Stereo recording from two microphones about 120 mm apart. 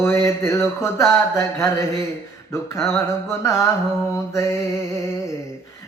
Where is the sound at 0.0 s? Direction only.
25° left (ahead or behind).